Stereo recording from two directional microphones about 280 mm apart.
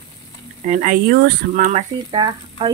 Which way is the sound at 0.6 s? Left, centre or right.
Right.